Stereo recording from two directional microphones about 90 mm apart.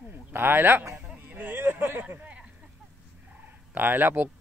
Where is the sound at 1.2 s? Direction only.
20° right (ahead or behind).